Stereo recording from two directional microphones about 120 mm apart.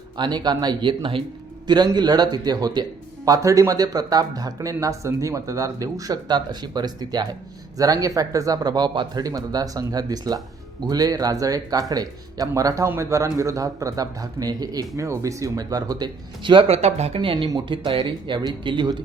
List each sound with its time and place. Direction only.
0.2 s speech: 35° right (ahead or behind); by 17.2 s 60° right (ahead or behind)
17.7 s speech: 45° right (ahead or behind)